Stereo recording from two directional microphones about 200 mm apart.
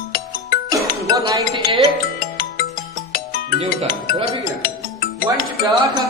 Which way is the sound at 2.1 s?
50° left (ahead or behind).